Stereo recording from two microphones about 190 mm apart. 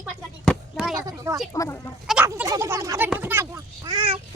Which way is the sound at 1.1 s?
15° right (ahead or behind).